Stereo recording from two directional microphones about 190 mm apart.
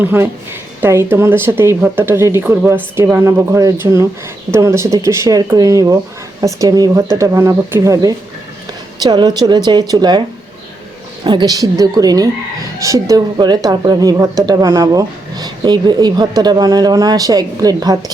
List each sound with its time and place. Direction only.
0.0 s a woman's voice: 10° right (ahead or behind)